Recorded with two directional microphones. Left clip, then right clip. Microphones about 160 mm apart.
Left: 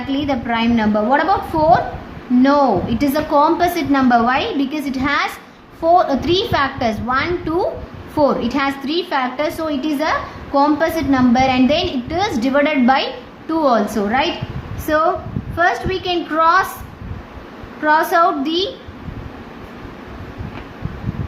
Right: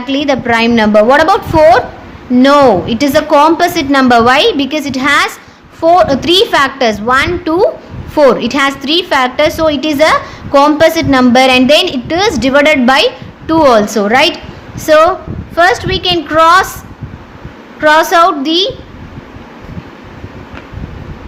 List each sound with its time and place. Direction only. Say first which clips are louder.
0.1 s a woman's voice: right 9 dB; 55° right (ahead or behind)
17.8 s a woman's voice: right 7 dB; 55° right (ahead or behind)